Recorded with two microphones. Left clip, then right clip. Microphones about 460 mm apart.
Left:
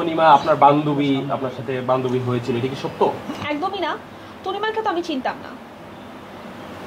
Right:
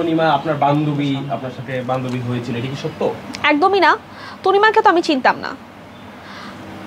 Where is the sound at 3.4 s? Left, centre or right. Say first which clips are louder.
Right 11 dB; right.